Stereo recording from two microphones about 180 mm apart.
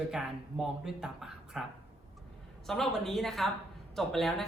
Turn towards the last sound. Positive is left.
turn(degrees=0)  # may be behind; listen again after turning